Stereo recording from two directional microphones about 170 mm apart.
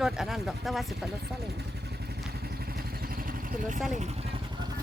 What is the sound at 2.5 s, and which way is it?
Vehicle, 65° right (ahead or behind).